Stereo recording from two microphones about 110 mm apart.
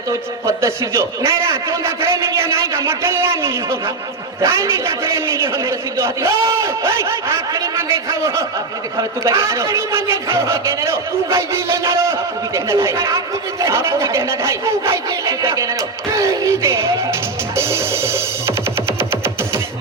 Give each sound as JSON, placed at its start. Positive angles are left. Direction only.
{"t": 0.1, "sound": "a man's voice", "side_deg": -25}
{"t": 17.6, "sound": "music", "side_deg": -25}